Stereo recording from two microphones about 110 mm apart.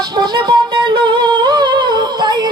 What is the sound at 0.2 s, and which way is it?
Humming, 45° right (ahead or behind).